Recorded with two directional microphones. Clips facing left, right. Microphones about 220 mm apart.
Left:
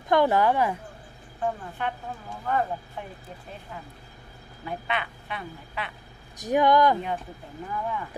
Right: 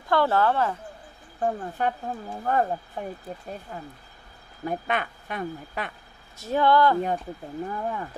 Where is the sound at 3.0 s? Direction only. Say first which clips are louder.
Right 5 dB; 40° right (ahead or behind).